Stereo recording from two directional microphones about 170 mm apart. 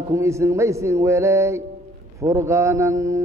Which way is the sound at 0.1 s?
15° right (ahead or behind).